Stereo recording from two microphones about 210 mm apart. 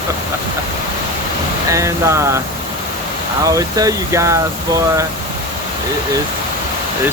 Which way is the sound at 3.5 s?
15° right (ahead or behind).